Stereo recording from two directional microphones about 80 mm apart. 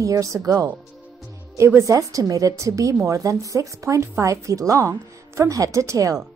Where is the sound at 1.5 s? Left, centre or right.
Right.